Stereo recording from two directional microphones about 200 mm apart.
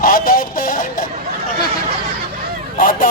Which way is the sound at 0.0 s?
45° left (ahead or behind).